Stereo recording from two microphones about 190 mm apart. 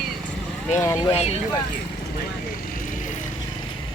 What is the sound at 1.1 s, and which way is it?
Speech, 35° left (ahead or behind).